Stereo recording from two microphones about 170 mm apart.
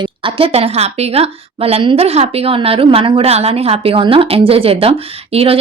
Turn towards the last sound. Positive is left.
turn(degrees=-35)  # may be behind; listen again after turning